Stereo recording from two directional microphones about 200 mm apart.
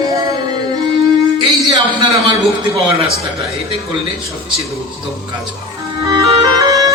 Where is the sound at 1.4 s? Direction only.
25° right (ahead or behind).